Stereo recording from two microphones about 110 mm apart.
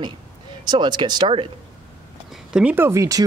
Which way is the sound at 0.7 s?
40° right (ahead or behind).